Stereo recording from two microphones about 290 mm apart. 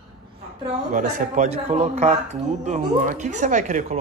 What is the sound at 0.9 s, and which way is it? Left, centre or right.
Speech, right.